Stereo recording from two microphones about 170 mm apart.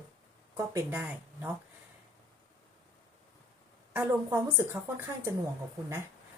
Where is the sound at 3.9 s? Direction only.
15° right (ahead or behind).